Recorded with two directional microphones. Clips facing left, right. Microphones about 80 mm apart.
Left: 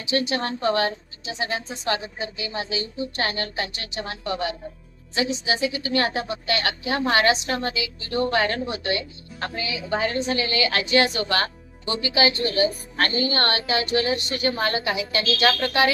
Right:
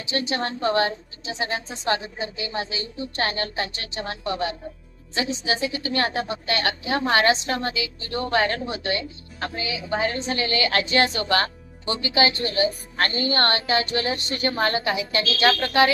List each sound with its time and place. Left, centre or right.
0.3 s a woman's voice: right